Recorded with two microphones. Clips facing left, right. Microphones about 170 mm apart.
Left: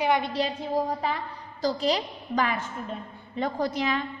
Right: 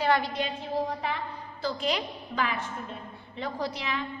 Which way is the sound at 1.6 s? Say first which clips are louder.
Left 4 dB; 35° left (ahead or behind).